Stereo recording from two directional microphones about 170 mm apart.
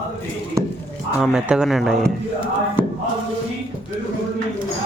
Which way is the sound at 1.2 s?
5° right (ahead or behind).